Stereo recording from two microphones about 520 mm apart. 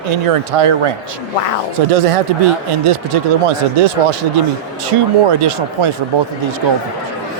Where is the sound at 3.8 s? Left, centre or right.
Right.